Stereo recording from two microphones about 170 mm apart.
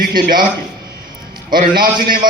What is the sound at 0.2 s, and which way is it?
Speech, 55° right (ahead or behind).